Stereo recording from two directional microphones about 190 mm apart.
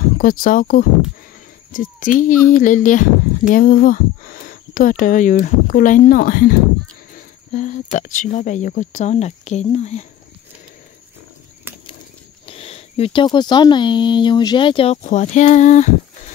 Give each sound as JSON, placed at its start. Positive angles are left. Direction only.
{"t": 0.2, "sound": "speech", "side_deg": 45}
{"t": 12.4, "sound": "speech", "side_deg": 30}